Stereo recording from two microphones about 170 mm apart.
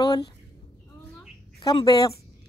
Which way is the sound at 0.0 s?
20° left (ahead or behind).